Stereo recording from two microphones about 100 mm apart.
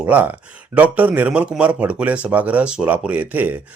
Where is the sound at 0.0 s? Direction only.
20° right (ahead or behind).